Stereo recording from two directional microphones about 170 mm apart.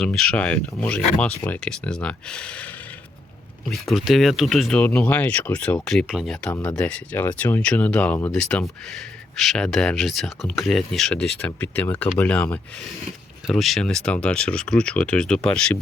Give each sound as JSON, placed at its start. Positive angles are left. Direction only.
{"t": 0.0, "sound": "speech", "side_deg": 5}
{"t": 3.7, "sound": "speech", "side_deg": 0}